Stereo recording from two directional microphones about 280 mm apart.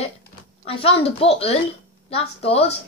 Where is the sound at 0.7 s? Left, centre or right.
Centre.